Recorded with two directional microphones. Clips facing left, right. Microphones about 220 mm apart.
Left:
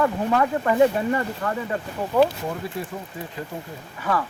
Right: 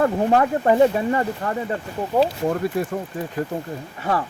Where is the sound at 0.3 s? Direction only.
35° right (ahead or behind).